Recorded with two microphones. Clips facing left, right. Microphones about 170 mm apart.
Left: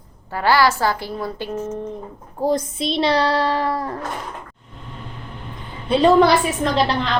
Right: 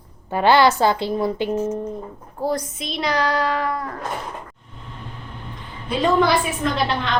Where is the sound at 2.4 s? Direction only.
25° left (ahead or behind).